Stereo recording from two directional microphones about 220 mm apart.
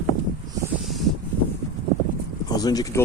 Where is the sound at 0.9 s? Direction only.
Centre (ahead or behind).